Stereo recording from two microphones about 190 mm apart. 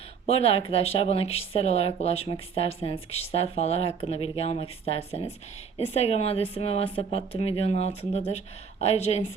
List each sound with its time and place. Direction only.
0.3 s speech: 30° left (ahead or behind)